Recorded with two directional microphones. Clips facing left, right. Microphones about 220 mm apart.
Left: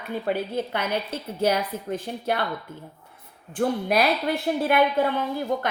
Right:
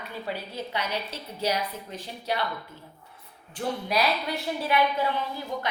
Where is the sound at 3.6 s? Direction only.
55° left (ahead or behind).